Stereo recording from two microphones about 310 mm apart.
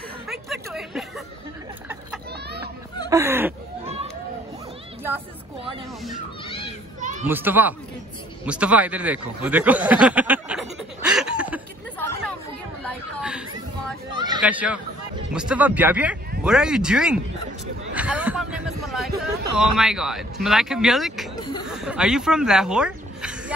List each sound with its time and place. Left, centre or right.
0.3 s a sound: centre
2.3 s hubbub: right
3.1 s speech: centre
3.8 s chatter: centre
6.4 s children playing: centre
7.0 s children playing: right
7.2 s speech: centre
8.5 s a sound: centre
14.1 s a sound: centre
14.4 s speech: centre
17.9 s a sound: centre
20.4 s speech: centre